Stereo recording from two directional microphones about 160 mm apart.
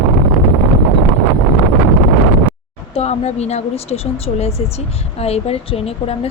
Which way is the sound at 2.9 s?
40° left (ahead or behind).